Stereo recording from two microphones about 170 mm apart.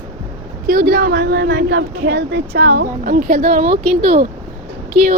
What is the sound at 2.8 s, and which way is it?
Speech, 55° right (ahead or behind).